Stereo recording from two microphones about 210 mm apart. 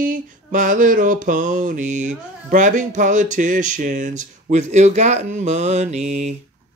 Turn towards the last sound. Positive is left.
turn(degrees=-30)  # may be behind; listen again after turning